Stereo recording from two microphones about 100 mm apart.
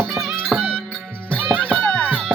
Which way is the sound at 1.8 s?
10° left (ahead or behind).